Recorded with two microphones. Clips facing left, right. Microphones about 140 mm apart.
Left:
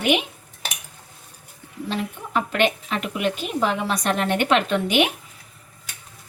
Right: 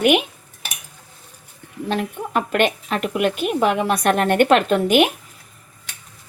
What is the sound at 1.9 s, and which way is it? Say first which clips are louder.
A woman's voice: right 4 dB; 55° right (ahead or behind).